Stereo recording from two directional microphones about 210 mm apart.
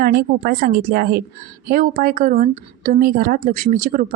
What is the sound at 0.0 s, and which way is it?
A woman's voice, 45° right (ahead or behind).